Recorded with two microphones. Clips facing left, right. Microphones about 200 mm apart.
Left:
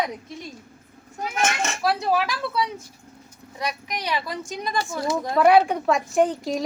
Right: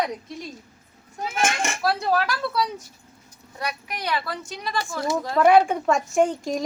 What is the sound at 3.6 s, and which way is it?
Speech, 15° left (ahead or behind).